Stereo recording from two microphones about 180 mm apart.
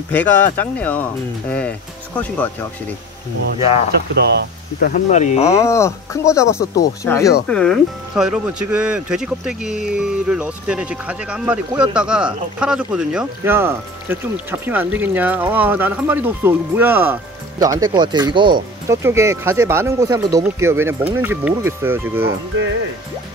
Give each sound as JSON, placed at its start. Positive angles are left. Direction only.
{"t": 0.1, "sound": "speech", "side_deg": 10}
{"t": 3.5, "sound": "speech", "side_deg": 35}
{"t": 4.7, "sound": "speech", "side_deg": 50}
{"t": 5.4, "sound": "speech", "side_deg": 15}
{"t": 7.4, "sound": "speech", "side_deg": 5}
{"t": 18.9, "sound": "speech", "side_deg": -15}